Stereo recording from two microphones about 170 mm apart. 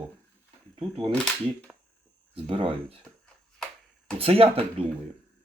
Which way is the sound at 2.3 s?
30° right (ahead or behind).